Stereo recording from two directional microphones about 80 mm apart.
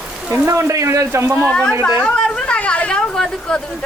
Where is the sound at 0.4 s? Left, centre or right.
Right.